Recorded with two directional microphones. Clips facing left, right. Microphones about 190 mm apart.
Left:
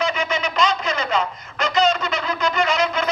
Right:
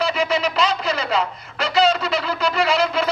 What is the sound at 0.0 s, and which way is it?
Radio, 35° right (ahead or behind).